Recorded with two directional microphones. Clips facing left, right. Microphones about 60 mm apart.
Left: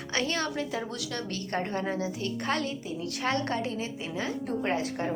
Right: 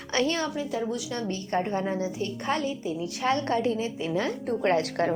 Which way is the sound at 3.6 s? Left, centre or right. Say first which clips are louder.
Right 6 dB; left.